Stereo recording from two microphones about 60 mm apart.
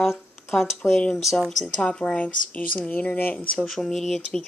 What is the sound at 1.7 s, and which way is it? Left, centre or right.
Speech, centre.